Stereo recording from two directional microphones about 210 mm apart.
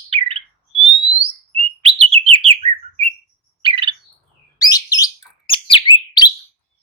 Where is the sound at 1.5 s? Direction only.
25° right (ahead or behind).